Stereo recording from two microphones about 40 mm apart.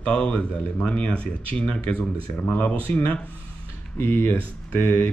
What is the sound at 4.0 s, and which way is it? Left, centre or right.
Speech, left.